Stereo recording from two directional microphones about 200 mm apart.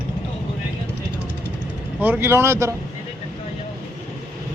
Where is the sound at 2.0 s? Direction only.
10° right (ahead or behind).